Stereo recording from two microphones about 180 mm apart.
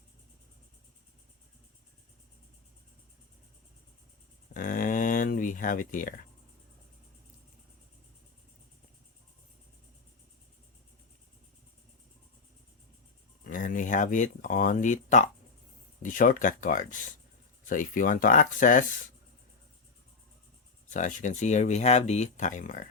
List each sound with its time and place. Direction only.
4.5 s a sound: 50° left (ahead or behind)
13.4 s speech: 50° left (ahead or behind)
20.9 s speech: 45° left (ahead or behind)